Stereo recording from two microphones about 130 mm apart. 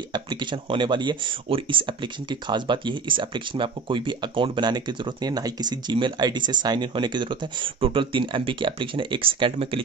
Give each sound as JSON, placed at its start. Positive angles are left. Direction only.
{"t": 0.1, "sound": "speech", "side_deg": -35}